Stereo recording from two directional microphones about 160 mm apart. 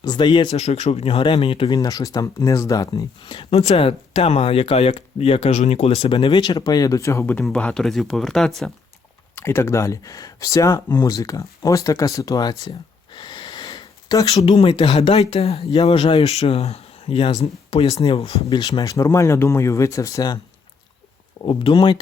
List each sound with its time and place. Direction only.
0.0 s a sound: 30° left (ahead or behind)
0.5 s speech: 40° left (ahead or behind); by 8.7 s centre (ahead or behind)
9.3 s speech: 15° left (ahead or behind)
13.1 s sniff: 30° left (ahead or behind)
14.3 s speech: 40° left (ahead or behind)
18.4 s speech: 25° left (ahead or behind)
21.4 s speech: 30° left (ahead or behind)